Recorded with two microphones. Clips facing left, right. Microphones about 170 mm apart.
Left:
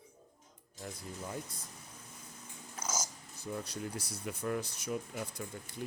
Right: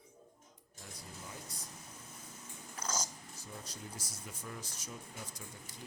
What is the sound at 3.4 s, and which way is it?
Speech, 65° left (ahead or behind).